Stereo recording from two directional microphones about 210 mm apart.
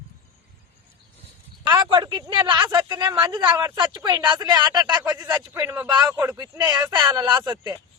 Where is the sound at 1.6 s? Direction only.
20° right (ahead or behind).